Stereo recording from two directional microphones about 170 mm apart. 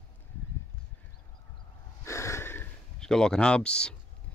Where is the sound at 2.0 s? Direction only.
15° left (ahead or behind).